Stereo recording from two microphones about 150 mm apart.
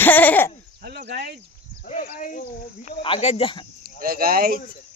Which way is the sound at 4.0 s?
75° right (ahead or behind).